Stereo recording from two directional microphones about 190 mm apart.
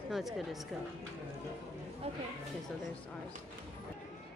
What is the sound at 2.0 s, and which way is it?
Speech, 30° right (ahead or behind).